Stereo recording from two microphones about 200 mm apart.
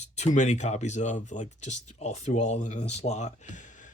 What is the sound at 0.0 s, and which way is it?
Speech, 35° left (ahead or behind).